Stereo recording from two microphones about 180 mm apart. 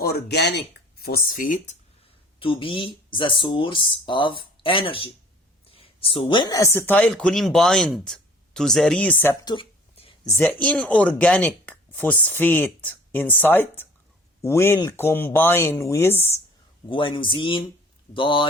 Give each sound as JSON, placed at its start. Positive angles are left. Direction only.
{"t": 0.0, "sound": "speech", "side_deg": 70}
{"t": 2.4, "sound": "speech", "side_deg": 30}
{"t": 9.4, "sound": "speech", "side_deg": 20}
{"t": 9.9, "sound": "a sound", "side_deg": 35}
{"t": 10.2, "sound": "speech", "side_deg": 10}
{"t": 16.9, "sound": "speech", "side_deg": 25}